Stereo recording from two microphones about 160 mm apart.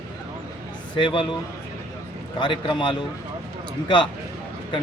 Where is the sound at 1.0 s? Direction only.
30° left (ahead or behind).